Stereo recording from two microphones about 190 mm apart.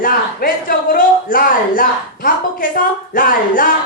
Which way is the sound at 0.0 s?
50° left (ahead or behind).